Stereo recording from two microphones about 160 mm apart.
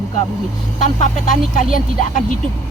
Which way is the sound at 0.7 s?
50° left (ahead or behind).